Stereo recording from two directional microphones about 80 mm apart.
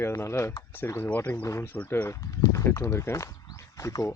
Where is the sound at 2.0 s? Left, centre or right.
Left.